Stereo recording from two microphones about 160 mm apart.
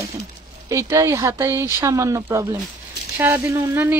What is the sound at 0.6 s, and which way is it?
Speech, 20° right (ahead or behind).